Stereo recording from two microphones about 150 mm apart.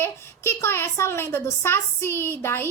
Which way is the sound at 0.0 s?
15° left (ahead or behind).